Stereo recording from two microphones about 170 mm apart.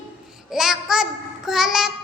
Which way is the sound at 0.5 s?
5° right (ahead or behind).